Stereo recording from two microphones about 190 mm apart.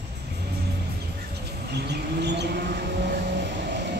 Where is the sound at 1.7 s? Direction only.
60° right (ahead or behind).